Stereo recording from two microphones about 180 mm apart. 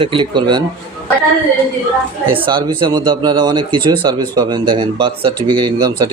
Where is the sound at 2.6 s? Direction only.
25° right (ahead or behind).